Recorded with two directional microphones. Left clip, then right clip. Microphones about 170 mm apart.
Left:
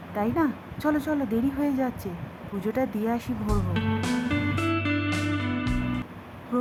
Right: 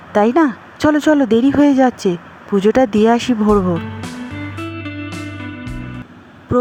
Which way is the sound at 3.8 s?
Centre (ahead or behind).